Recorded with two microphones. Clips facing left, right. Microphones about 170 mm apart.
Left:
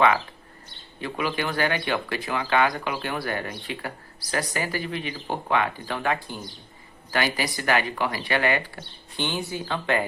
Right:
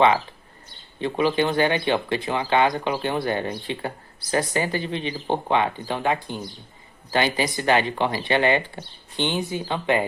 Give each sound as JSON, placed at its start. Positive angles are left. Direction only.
{"t": 1.0, "sound": "speech", "side_deg": -25}